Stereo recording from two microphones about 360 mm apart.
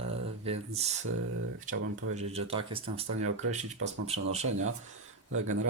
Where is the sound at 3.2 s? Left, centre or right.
Right.